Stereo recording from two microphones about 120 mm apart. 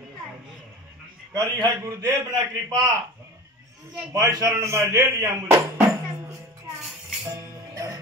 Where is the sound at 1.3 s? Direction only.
30° right (ahead or behind).